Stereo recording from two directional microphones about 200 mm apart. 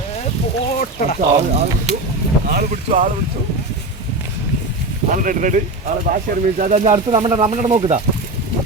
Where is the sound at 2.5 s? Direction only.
40° right (ahead or behind).